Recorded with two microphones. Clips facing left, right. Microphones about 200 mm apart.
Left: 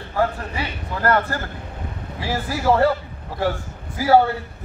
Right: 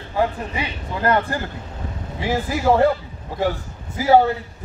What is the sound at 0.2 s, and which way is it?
A man's voice, 15° right (ahead or behind).